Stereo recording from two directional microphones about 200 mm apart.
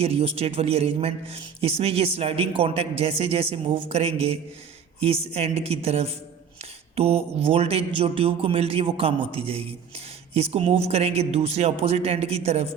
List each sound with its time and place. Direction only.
0.0 s a man's voice: 30° right (ahead or behind)